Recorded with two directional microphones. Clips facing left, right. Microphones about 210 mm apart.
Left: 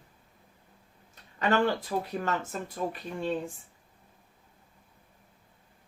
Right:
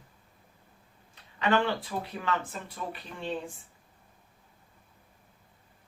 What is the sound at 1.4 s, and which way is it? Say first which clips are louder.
Speech: left 1 dB; 45° left (ahead or behind).